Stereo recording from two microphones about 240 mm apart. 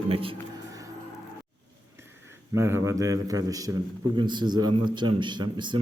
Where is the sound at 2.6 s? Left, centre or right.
Centre.